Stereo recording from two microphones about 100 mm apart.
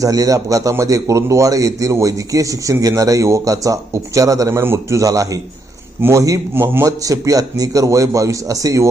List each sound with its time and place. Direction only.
0.0 s a man's voice: 35° right (ahead or behind)
6.8 s a man's voice: 35° right (ahead or behind)